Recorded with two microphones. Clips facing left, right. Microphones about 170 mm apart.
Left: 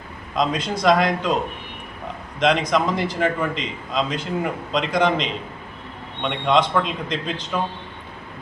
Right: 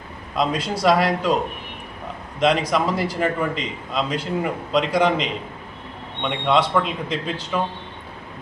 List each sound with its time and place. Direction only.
0.3 s a man's voice: 5° right (ahead or behind)
2.4 s a man's voice: 5° right (ahead or behind)
6.5 s a man's voice: 5° right (ahead or behind)